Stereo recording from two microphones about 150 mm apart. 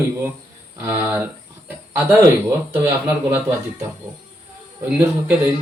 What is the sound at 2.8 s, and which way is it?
Speech, 15° right (ahead or behind).